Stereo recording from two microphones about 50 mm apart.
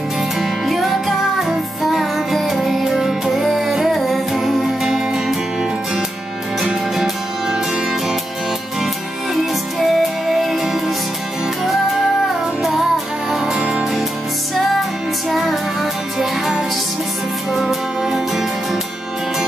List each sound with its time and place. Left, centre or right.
0.4 s music: centre
9.3 s music: centre
14.5 s music: centre